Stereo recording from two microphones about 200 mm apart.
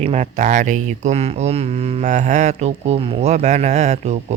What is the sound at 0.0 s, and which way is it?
Speech, 35° right (ahead or behind).